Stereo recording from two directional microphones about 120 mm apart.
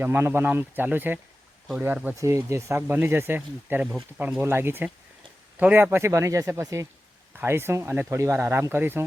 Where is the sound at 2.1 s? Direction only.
25° right (ahead or behind).